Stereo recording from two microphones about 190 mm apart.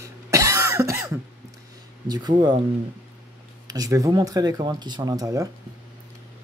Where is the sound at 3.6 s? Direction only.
20° right (ahead or behind).